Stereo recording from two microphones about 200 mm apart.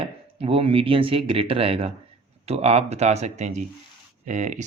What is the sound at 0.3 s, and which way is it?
Speech, 30° right (ahead or behind).